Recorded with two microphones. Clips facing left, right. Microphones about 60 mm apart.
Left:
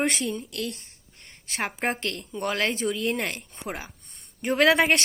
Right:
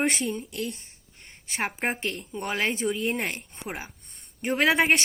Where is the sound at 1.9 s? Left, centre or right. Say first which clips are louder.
Left 1 dB; centre.